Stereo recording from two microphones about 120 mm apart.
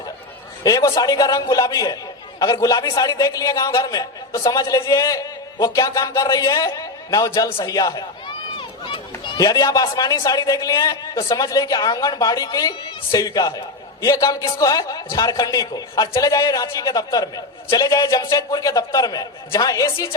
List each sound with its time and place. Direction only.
0.6 s a man's voice: 30° left (ahead or behind)
8.5 s a man's voice: 45° left (ahead or behind)